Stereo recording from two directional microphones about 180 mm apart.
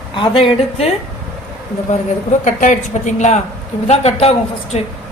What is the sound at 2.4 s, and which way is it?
A woman's voice, 45° left (ahead or behind).